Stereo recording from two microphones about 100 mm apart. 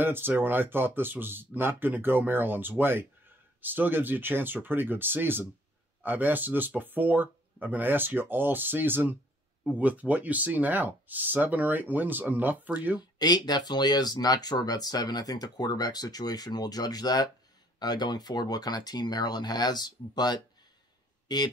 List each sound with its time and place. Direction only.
0.0 s speech: 20° right (ahead or behind)
13.2 s speech: 45° left (ahead or behind)